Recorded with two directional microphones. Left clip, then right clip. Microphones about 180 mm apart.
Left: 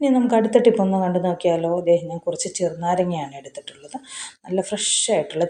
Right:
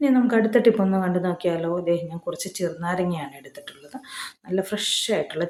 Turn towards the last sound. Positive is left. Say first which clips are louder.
# left 3 dB
turn(degrees=0)  # may be behind; listen again after turning